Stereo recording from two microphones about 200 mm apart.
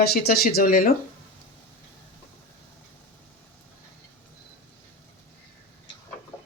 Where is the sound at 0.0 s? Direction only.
50° left (ahead or behind).